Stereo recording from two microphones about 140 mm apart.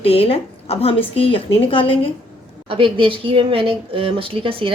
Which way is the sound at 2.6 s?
40° right (ahead or behind).